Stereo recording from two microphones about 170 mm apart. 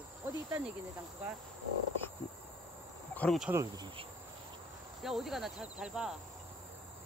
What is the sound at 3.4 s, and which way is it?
Cricket, 20° right (ahead or behind).